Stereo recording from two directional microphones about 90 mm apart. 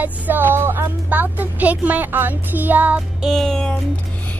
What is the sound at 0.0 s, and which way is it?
Speech, 20° right (ahead or behind).